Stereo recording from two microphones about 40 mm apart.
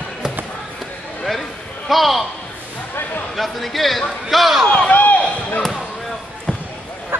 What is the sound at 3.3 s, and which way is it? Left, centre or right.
Speech, centre.